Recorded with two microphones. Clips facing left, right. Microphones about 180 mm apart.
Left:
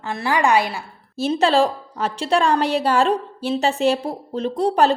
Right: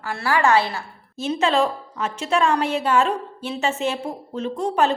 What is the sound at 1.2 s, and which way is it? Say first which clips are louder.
A woman's voice: left 3 dB; 35° left (ahead or behind).